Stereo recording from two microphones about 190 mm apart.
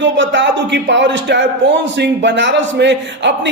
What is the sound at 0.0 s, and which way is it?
Speech, 70° right (ahead or behind).